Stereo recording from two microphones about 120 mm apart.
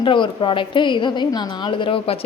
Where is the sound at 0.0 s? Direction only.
40° left (ahead or behind).